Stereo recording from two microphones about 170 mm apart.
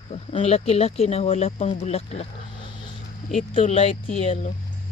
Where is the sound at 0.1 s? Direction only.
35° left (ahead or behind).